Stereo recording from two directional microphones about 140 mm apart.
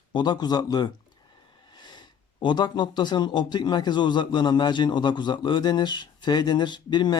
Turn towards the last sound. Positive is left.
turn(degrees=30)  # may be behind; listen again after turning